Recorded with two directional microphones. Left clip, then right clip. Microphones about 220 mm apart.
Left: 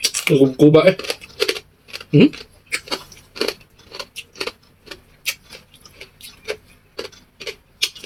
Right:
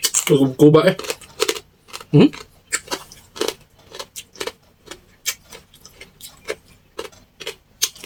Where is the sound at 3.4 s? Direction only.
20° right (ahead or behind).